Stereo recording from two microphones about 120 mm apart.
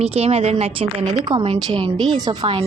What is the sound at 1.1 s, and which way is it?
A woman's voice, 35° right (ahead or behind).